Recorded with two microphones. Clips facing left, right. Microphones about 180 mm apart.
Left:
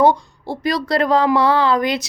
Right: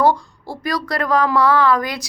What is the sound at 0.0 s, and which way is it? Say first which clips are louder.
A woman's voice: left 2 dB; 20° left (ahead or behind).